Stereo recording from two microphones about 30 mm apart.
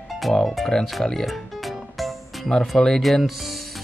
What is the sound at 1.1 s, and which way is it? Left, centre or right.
Music, centre.